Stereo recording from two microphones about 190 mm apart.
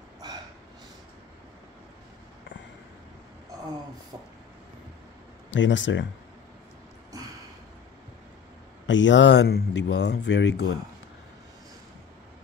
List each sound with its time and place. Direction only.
0.2 s snort: 20° right (ahead or behind)
5.5 s speech: 75° left (ahead or behind)
8.8 s speech: 75° left (ahead or behind)